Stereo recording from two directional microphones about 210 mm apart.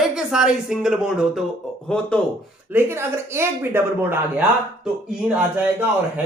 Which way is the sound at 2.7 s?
10° right (ahead or behind).